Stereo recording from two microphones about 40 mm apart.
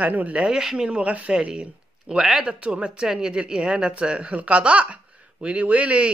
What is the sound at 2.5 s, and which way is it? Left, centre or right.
Speech, right.